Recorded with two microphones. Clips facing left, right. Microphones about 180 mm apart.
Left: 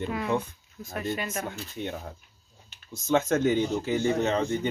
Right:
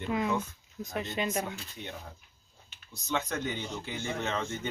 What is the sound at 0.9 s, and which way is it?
Speech, 20° right (ahead or behind).